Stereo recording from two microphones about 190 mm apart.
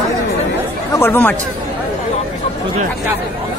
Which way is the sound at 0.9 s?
10° left (ahead or behind).